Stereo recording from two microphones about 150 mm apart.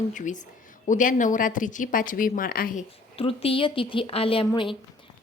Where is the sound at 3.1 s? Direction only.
40° left (ahead or behind).